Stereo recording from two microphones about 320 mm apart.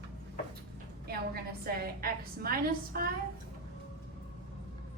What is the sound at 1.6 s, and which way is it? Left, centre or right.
A woman's voice, right.